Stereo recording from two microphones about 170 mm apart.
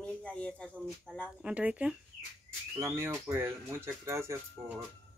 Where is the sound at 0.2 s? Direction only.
5° left (ahead or behind).